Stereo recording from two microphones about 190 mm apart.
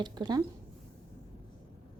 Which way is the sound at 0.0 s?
20° right (ahead or behind).